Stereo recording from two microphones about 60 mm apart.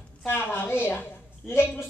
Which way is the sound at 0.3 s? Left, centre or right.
Left.